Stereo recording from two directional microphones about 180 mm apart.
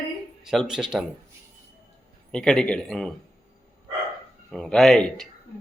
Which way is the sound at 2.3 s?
5° left (ahead or behind).